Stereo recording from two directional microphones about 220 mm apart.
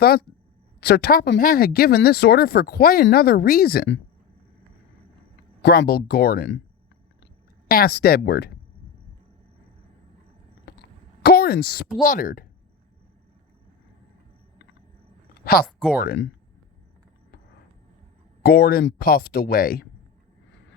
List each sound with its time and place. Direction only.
0.0 s speech: 45° left (ahead or behind)
5.6 s speech: 45° left (ahead or behind)
7.7 s speech: 45° left (ahead or behind)
10.7 s a sound: 50° left (ahead or behind)
12.0 s speech: 35° left (ahead or behind)
15.4 s speech: 45° left (ahead or behind)
15.6 s speech: centre (ahead or behind)
16.0 s speech: 50° left (ahead or behind)
18.4 s speech: 45° left (ahead or behind)